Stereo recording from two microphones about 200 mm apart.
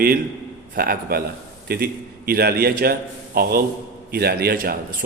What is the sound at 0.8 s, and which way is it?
A man's voice, 50° right (ahead or behind).